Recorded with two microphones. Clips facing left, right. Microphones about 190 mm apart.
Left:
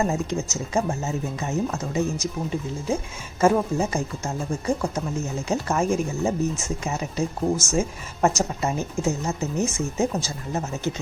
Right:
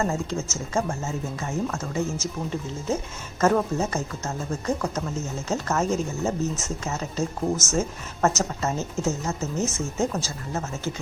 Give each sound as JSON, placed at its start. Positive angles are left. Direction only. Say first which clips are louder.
{"t": 0.0, "sound": "speech", "louder": "left 2 dB", "side_deg": 15}